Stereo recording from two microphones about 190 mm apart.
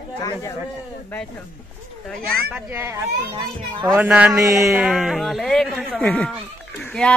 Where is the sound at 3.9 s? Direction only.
5° right (ahead or behind).